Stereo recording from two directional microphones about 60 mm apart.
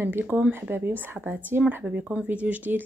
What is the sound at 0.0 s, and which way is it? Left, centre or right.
Speech, right.